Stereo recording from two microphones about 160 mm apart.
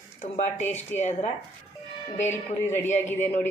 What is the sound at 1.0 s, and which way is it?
Speech, 45° left (ahead or behind).